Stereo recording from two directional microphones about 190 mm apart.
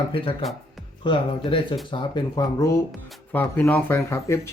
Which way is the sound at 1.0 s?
25° left (ahead or behind).